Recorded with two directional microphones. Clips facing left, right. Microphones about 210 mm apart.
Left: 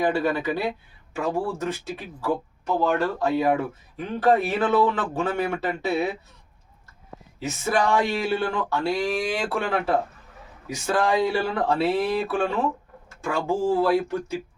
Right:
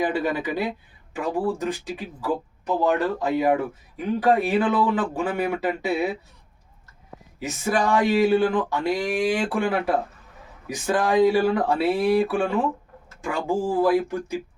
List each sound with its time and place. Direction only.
0.0 s speech: 15° right (ahead or behind)
7.3 s speech: 15° right (ahead or behind)